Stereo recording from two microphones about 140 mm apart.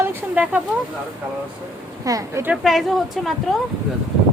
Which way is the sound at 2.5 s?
Centre (ahead or behind).